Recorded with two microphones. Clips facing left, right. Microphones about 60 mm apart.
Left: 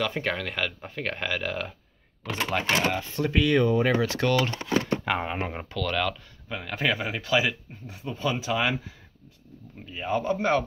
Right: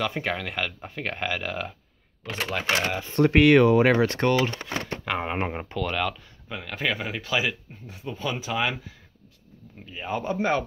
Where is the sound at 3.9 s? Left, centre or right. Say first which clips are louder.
Right 4 dB; right.